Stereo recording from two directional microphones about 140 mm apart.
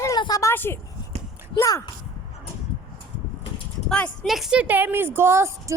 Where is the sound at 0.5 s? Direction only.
15° left (ahead or behind).